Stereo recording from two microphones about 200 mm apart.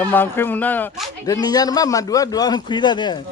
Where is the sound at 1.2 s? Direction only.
20° left (ahead or behind).